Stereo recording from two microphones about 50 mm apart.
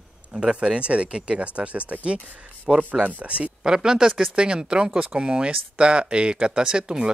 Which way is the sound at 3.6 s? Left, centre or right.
Centre.